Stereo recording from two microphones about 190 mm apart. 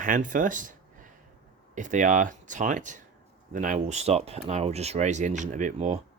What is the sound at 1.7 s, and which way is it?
Speech, 40° right (ahead or behind).